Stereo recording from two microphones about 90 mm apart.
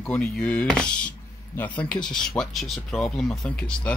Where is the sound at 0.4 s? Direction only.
15° left (ahead or behind).